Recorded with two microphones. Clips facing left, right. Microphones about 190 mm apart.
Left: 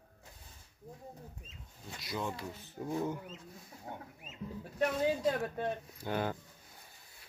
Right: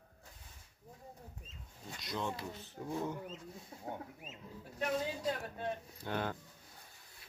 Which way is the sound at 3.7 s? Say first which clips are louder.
Right 2 dB; 25° right (ahead or behind).